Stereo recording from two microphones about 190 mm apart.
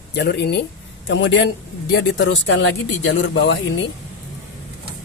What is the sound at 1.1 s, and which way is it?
Speech, 70° left (ahead or behind).